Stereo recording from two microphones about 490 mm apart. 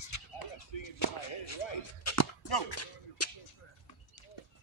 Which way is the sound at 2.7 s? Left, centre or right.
Left.